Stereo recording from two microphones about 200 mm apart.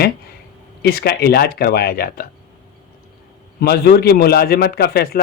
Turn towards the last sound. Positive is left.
turn(degrees=50)  # may be behind; listen again after turning